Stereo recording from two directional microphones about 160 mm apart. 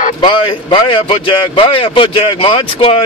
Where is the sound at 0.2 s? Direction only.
30° left (ahead or behind).